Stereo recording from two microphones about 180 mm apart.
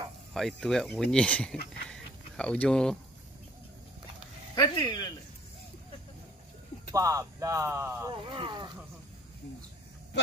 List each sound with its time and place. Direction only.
0.3 s speech: centre (ahead or behind)
4.6 s speech: 25° left (ahead or behind)
6.9 s speech: 20° right (ahead or behind)
8.3 s speech: 25° right (ahead or behind)